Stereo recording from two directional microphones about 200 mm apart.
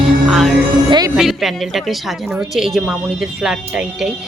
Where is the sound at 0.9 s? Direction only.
20° right (ahead or behind).